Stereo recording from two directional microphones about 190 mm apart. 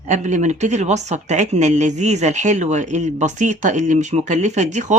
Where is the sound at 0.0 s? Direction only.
40° right (ahead or behind).